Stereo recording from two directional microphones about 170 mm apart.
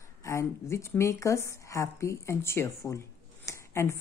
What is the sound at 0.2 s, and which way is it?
A woman's voice, 20° left (ahead or behind).